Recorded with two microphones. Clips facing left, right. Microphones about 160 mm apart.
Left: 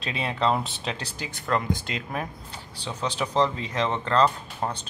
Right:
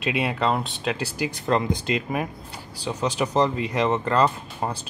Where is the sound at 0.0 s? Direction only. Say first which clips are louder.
Right 2 dB; 5° right (ahead or behind).